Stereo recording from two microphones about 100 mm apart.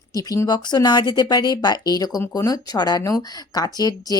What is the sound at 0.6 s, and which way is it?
Speech, 45° left (ahead or behind).